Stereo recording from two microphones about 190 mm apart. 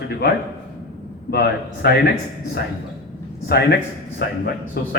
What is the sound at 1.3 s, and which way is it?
Speech, 55° left (ahead or behind).